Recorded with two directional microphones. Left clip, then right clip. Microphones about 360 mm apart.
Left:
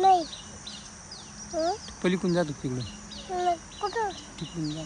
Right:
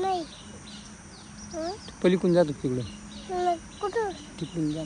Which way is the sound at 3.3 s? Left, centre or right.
Centre.